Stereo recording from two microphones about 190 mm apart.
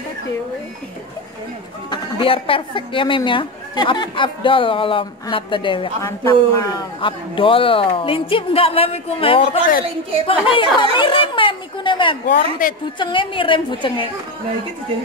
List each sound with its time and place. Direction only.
1.9 s a woman's voice: 25° left (ahead or behind)
12.3 s a woman's voice: 45° left (ahead or behind)
13.0 s a woman's voice: 25° left (ahead or behind)